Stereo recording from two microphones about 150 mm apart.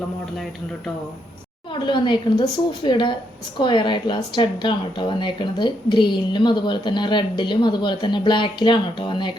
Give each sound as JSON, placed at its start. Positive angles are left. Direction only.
{"t": 1.7, "sound": "speech", "side_deg": 30}